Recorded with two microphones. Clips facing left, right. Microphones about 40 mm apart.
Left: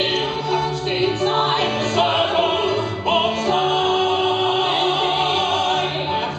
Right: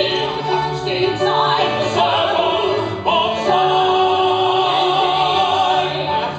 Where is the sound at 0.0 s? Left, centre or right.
Centre.